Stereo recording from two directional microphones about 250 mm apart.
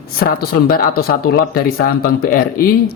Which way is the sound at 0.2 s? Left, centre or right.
Left.